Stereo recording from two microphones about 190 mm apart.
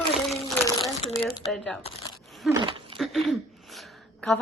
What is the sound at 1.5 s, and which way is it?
Child singing, 5° left (ahead or behind).